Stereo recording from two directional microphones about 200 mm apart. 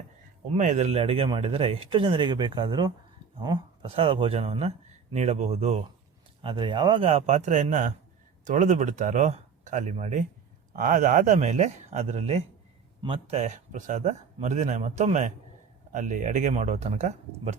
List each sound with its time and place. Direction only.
0.5 s speech: 35° right (ahead or behind)